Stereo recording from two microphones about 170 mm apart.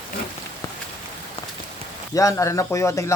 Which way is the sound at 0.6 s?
15° left (ahead or behind).